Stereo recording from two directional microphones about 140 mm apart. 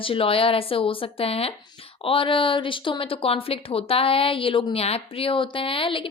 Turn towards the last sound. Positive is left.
turn(degrees=40)  # may be behind; listen again after turning